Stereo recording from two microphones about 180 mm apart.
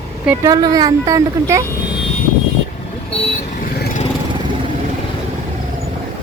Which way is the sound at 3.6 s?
55° left (ahead or behind).